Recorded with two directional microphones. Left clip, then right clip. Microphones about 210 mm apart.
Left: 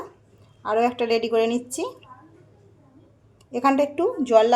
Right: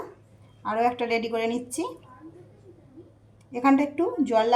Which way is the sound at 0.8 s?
50° left (ahead or behind).